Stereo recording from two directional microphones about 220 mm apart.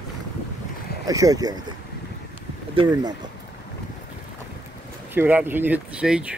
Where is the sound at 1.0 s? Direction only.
15° right (ahead or behind).